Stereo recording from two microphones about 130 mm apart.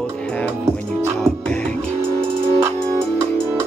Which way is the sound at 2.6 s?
20° right (ahead or behind).